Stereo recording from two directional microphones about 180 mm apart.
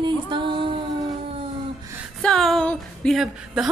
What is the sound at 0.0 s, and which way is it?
Music, 25° right (ahead or behind).